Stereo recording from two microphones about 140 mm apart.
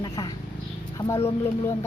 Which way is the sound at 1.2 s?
15° left (ahead or behind).